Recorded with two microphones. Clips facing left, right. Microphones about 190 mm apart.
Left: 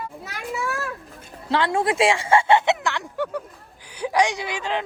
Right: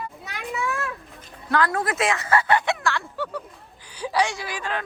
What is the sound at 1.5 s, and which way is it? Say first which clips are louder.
A woman's voice: left 2 dB; 25° left (ahead or behind).